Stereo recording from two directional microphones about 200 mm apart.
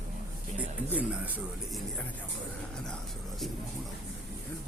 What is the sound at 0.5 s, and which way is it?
Speech, 10° right (ahead or behind).